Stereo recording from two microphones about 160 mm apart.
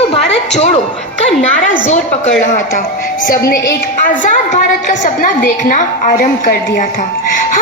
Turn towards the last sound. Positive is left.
turn(degrees=65)  # may be behind; listen again after turning